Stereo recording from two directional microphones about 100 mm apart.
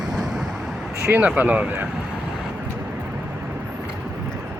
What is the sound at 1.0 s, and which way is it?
Speech, 15° right (ahead or behind).